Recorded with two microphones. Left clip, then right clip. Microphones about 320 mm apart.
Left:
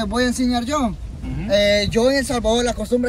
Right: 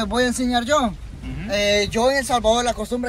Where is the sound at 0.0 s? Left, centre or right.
Centre.